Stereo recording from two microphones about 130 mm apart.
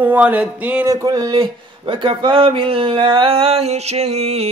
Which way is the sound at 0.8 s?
30° right (ahead or behind).